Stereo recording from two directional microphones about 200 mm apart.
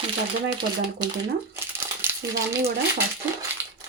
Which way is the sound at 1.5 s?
10° right (ahead or behind).